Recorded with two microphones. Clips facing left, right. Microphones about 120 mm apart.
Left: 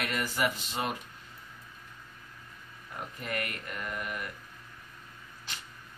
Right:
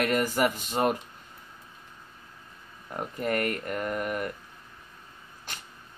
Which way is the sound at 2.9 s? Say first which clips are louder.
Right 8 dB; 45° right (ahead or behind).